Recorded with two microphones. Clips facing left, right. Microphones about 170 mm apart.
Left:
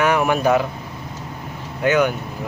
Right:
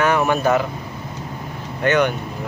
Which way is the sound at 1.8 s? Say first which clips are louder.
Even; 5° left (ahead or behind).